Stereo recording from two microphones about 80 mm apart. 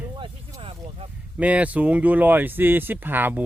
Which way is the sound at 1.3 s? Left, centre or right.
Centre.